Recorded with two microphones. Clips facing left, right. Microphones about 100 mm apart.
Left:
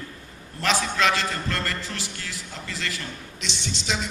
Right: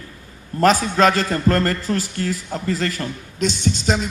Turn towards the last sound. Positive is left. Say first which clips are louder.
# right 9 dB
turn(degrees=-45)  # may be behind; listen again after turning